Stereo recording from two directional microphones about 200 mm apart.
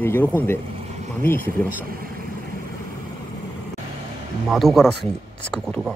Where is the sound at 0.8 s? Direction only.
35° right (ahead or behind).